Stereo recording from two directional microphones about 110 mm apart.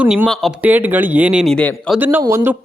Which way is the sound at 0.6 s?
15° right (ahead or behind).